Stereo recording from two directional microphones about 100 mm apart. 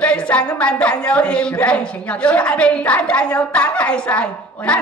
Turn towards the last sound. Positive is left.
turn(degrees=10)  # may be behind; listen again after turning